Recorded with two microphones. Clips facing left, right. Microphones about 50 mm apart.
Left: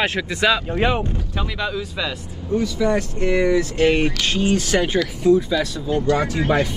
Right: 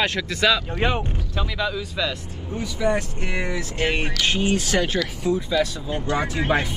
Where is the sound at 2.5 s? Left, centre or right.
Right.